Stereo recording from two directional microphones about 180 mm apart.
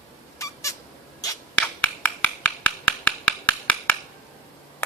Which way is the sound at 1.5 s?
10° left (ahead or behind).